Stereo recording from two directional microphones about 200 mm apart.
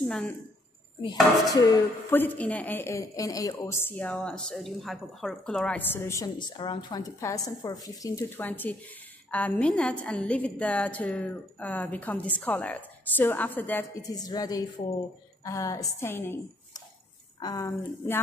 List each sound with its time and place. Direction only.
0.0 s a woman's voice: 5° left (ahead or behind)
1.5 s a woman's voice: 15° left (ahead or behind)
17.4 s a woman's voice: 20° left (ahead or behind)